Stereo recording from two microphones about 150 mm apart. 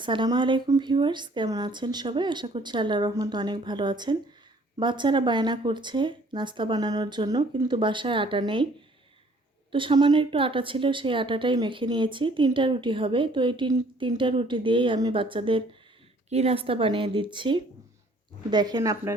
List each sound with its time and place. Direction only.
0.0 s a woman's voice: 30° right (ahead or behind)
9.7 s a woman's voice: 30° right (ahead or behind)